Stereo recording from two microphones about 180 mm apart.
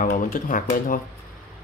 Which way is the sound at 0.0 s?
50° left (ahead or behind).